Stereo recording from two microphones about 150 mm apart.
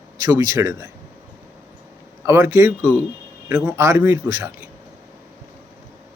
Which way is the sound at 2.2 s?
15° right (ahead or behind).